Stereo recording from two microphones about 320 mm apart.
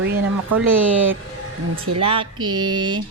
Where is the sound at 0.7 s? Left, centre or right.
Centre.